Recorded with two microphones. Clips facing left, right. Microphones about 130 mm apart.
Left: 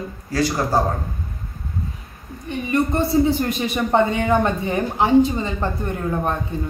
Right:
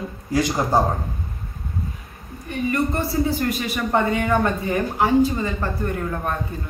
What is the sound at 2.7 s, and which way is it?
A man's voice, 25° left (ahead or behind).